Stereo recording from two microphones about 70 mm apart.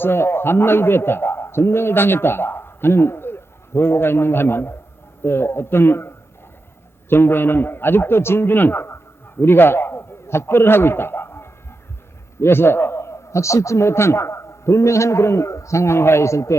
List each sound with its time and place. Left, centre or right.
0.0 s a man's voice: left